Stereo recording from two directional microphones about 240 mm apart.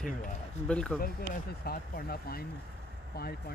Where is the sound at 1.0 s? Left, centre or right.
Left.